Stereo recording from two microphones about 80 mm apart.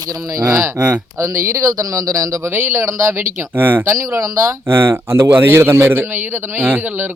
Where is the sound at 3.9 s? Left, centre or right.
Right.